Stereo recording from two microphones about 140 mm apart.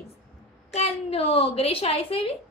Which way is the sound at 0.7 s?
45° left (ahead or behind).